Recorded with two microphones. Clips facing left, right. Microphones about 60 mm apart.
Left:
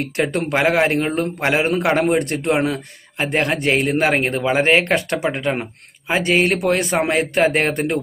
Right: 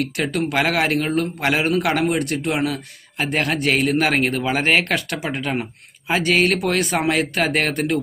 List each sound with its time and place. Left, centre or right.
0.0 s a man's voice: left